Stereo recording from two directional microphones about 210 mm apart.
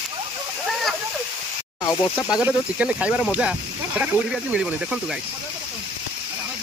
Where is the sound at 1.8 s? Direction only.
15° left (ahead or behind).